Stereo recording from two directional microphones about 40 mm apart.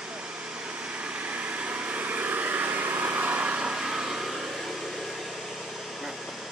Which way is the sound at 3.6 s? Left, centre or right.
Centre.